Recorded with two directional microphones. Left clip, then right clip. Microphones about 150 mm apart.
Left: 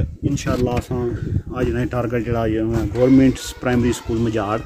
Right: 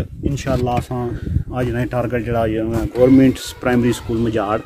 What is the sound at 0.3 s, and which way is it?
Speech, 25° right (ahead or behind).